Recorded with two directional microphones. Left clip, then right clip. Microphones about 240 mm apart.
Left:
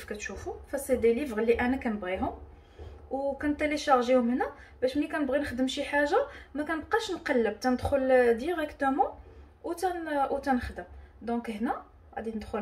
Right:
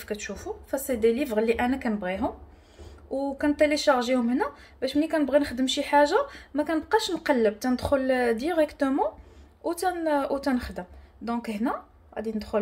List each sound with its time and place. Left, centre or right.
0.1 s a woman's voice: right
3.3 s a woman's voice: right